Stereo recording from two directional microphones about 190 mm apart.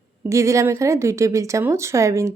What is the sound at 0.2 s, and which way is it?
A woman's voice, 15° right (ahead or behind).